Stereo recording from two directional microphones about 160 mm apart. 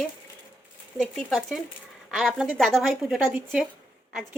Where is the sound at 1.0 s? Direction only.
Centre (ahead or behind).